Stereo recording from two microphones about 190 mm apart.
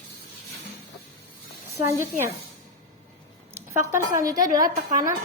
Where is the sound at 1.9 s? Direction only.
15° right (ahead or behind).